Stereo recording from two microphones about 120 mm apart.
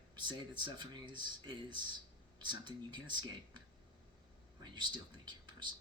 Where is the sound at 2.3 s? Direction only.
40° right (ahead or behind).